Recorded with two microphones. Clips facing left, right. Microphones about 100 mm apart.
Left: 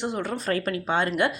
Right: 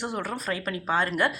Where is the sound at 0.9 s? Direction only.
25° left (ahead or behind).